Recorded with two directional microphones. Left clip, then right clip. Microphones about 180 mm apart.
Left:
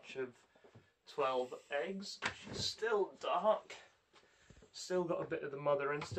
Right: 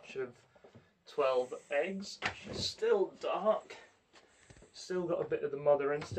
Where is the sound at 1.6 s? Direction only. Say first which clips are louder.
Right 5 dB; 10° left (ahead or behind).